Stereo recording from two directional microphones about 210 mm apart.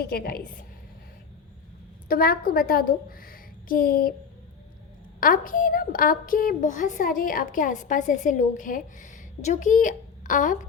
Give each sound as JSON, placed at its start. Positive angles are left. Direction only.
{"t": 0.0, "sound": "a woman's voice", "side_deg": 45}
{"t": 2.0, "sound": "a woman's voice", "side_deg": 45}
{"t": 5.2, "sound": "a woman's voice", "side_deg": 40}